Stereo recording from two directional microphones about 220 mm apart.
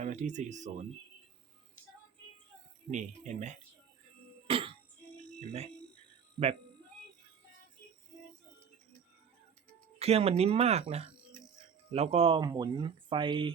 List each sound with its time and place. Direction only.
0.0 s speech: 35° right (ahead or behind)
2.9 s speech: 35° right (ahead or behind)
4.4 s music: 25° right (ahead or behind)
10.0 s speech: 30° right (ahead or behind)